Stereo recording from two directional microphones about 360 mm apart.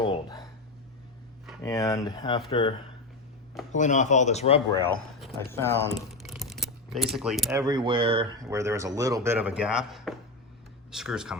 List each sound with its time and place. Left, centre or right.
0.0 s a sound: centre
1.5 s speech: centre
3.8 s speech: centre